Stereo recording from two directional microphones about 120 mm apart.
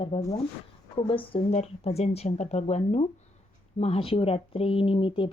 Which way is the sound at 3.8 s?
50° left (ahead or behind).